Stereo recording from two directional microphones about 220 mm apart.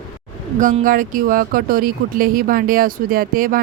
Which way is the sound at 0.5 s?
35° right (ahead or behind).